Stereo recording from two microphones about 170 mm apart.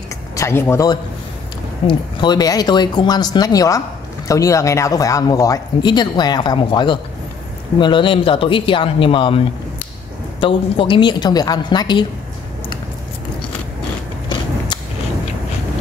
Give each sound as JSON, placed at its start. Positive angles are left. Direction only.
{"t": 0.4, "sound": "a man's voice", "side_deg": 15}